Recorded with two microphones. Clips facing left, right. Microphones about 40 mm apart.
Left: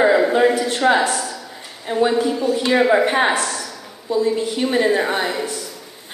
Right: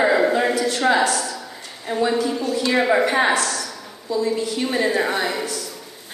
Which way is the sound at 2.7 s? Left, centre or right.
Centre.